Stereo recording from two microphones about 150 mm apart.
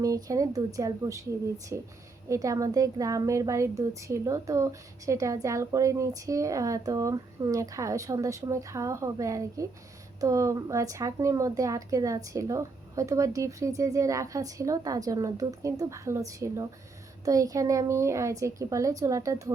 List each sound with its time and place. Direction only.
0.0 s a woman's voice: 20° right (ahead or behind)